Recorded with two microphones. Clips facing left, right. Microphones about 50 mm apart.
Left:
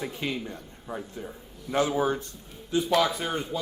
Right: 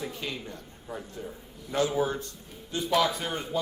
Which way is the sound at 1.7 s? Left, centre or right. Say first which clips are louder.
Left 2 dB; left.